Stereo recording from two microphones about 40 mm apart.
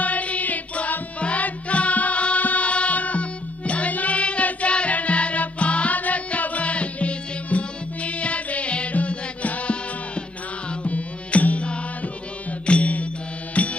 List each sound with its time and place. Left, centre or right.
0.0 s music: left